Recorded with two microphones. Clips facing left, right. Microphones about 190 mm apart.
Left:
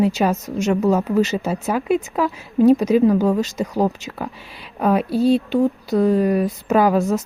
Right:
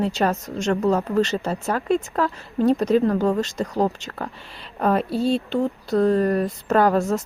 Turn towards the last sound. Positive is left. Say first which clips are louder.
# left 2 dB
turn(degrees=0)  # may be behind; listen again after turning